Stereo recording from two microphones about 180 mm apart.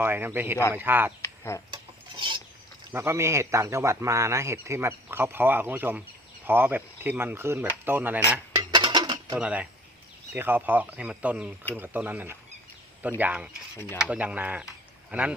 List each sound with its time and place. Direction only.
0.0 s a man's voice: 10° right (ahead or behind)
1.2 s chicken: 15° left (ahead or behind)
1.7 s filing: 25° right (ahead or behind)
2.9 s a man's voice: 15° right (ahead or behind)
8.5 s dishes: 25° right (ahead or behind)
9.4 s a man's voice: 5° right (ahead or behind)